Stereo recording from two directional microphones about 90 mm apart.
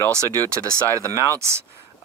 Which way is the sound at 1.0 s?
30° right (ahead or behind).